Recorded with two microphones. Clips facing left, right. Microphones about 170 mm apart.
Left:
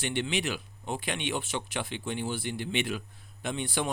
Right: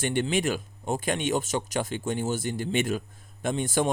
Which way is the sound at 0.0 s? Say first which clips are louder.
Right 5 dB; 45° right (ahead or behind).